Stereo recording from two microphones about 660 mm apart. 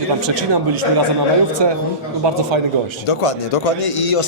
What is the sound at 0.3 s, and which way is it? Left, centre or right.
Speech, right.